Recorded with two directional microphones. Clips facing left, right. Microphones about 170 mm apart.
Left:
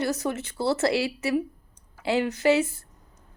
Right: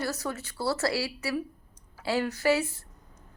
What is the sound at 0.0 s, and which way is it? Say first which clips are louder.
A woman's voice: left 5 dB; 20° left (ahead or behind).